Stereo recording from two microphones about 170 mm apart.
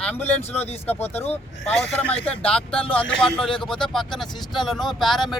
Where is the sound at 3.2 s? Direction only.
5° left (ahead or behind).